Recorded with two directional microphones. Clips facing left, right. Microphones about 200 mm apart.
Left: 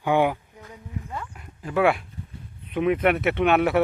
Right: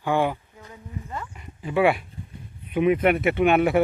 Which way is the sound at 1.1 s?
Centre (ahead or behind).